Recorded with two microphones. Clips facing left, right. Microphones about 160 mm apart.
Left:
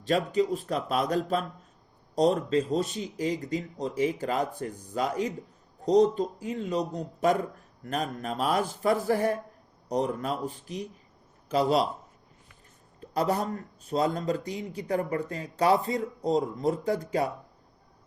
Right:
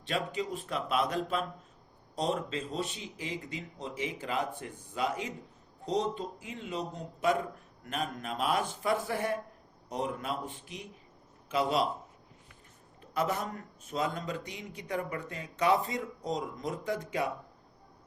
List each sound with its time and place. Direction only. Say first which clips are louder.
0.0 s a man's voice: left 8 dB; 40° left (ahead or behind)
13.0 s a man's voice: left 5 dB; 35° left (ahead or behind)